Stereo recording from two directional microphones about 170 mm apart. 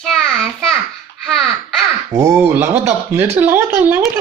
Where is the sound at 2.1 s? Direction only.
15° right (ahead or behind).